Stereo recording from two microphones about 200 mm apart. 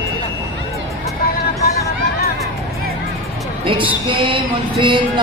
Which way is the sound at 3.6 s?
25° right (ahead or behind).